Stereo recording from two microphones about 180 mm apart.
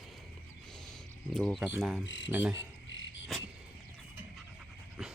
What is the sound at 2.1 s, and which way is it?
Speech, 90° left.